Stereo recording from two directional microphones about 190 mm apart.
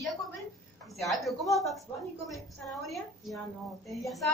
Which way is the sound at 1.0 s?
Centre (ahead or behind).